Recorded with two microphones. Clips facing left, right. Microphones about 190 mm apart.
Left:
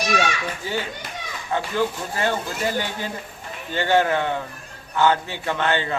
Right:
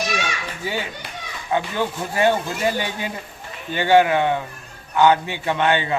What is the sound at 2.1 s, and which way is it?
A man's voice, 15° right (ahead or behind).